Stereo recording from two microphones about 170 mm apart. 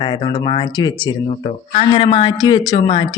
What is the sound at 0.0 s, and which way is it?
Speech, 30° left (ahead or behind).